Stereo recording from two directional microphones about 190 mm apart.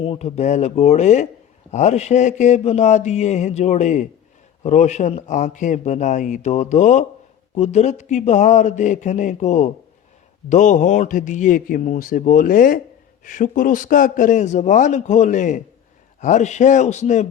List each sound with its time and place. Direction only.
0.0 s a man's voice: 30° left (ahead or behind)